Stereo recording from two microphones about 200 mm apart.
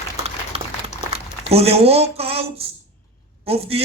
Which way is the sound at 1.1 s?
30° right (ahead or behind).